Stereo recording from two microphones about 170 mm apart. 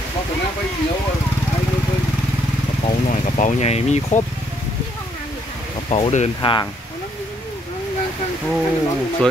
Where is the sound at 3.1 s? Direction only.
50° left (ahead or behind).